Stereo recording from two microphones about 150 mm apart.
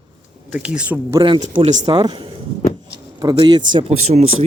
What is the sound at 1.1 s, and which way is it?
Speech, 35° right (ahead or behind).